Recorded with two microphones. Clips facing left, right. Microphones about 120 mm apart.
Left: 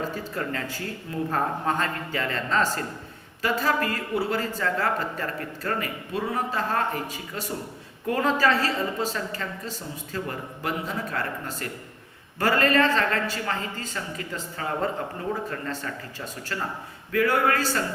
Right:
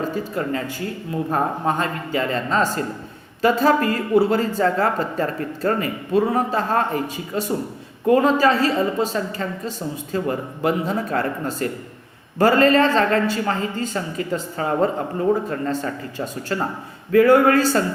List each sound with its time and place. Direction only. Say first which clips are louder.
0.1 s speech: right 6 dB; 20° right (ahead or behind)